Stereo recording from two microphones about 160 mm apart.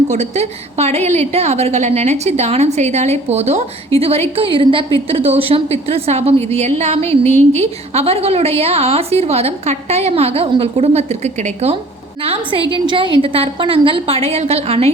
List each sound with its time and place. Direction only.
0.1 s a woman's voice: 45° right (ahead or behind)
12.7 s a woman's voice: 30° right (ahead or behind)